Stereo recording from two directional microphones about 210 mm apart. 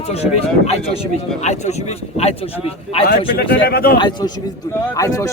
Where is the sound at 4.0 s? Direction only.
20° left (ahead or behind).